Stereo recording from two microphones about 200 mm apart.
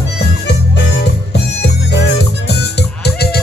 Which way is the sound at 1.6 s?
55° left (ahead or behind).